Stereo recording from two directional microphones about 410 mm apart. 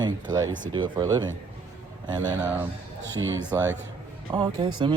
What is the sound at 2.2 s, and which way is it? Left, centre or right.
Speech, centre.